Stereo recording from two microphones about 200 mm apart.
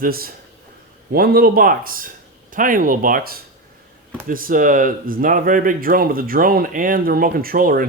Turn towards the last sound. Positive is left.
turn(degrees=-45)  # may be behind; listen again after turning